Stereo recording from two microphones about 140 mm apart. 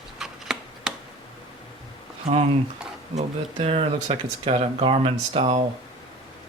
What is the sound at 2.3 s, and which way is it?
Speech, 45° right (ahead or behind).